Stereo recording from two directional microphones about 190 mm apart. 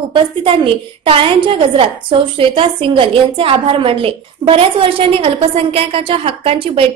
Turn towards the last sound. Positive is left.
turn(degrees=-30)  # may be behind; listen again after turning